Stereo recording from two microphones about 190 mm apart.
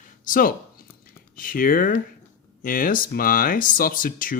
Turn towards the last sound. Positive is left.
turn(degrees=45)  # may be behind; listen again after turning